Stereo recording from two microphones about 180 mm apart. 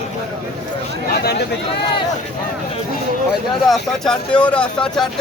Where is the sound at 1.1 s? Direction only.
60° left (ahead or behind).